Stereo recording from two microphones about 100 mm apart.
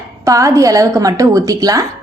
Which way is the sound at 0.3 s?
35° right (ahead or behind).